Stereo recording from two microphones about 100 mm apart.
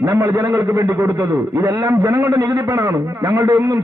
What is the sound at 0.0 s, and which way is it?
A man's voice, 30° right (ahead or behind).